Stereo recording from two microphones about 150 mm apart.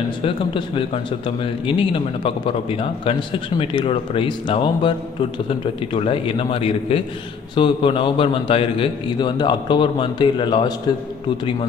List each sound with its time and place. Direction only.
0.2 s a man's voice: 35° left (ahead or behind)